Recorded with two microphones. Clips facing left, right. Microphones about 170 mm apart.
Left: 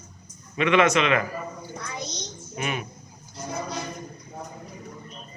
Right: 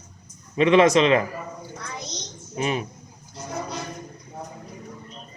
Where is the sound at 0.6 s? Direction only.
35° right (ahead or behind).